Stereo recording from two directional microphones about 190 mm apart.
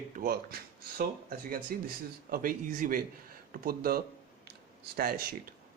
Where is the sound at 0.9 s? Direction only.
50° right (ahead or behind).